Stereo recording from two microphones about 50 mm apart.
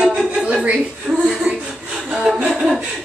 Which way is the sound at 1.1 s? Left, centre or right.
Right.